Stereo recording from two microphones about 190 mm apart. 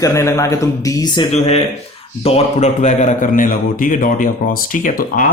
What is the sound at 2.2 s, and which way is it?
Speech, 35° left (ahead or behind).